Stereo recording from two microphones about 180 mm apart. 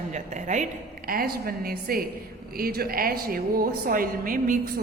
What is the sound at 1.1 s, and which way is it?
A woman's voice, 55° right (ahead or behind).